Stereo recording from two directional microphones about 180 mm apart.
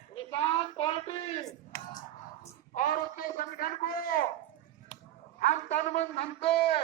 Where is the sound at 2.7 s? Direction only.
50° left (ahead or behind).